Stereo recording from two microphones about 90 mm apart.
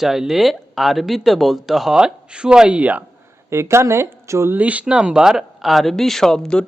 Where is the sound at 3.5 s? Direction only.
30° right (ahead or behind).